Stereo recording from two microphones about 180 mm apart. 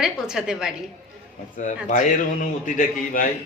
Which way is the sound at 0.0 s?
5° right (ahead or behind).